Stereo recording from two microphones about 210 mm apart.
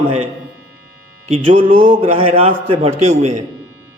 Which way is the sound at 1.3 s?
25° right (ahead or behind).